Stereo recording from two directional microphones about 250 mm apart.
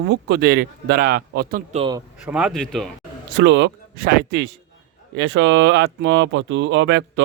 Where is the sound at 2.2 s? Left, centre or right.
Centre.